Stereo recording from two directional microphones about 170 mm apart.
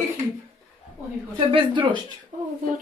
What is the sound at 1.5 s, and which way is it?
Speech, 30° right (ahead or behind).